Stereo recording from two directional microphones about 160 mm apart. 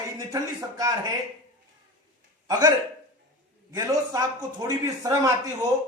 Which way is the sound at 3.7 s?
20° right (ahead or behind).